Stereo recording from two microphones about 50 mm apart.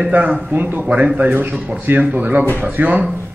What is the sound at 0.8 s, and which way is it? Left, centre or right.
Speech, right.